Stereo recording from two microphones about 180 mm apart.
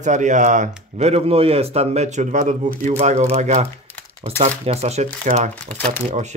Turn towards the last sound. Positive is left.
turn(degrees=10)  # may be behind; listen again after turning